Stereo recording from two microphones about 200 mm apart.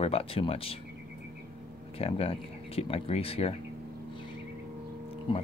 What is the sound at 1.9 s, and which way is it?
Speech, 30° left (ahead or behind).